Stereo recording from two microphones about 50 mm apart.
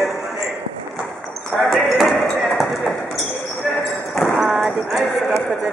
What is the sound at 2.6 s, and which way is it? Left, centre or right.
Basketball bounce, centre.